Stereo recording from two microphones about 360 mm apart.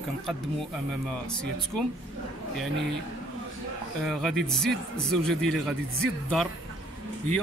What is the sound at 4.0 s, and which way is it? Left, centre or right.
Speech, centre.